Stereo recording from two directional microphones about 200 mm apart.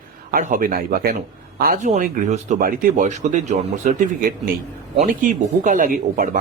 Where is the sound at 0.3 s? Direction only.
45° right (ahead or behind).